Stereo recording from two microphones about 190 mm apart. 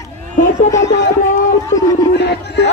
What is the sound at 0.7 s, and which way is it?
Speech, 15° left (ahead or behind).